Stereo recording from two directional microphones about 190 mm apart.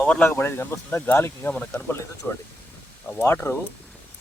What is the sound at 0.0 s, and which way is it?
Speech, 10° left (ahead or behind).